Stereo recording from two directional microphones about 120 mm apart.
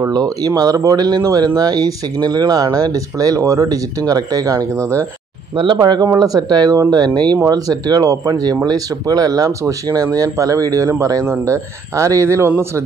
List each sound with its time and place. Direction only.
0.0 s speech: 30° right (ahead or behind)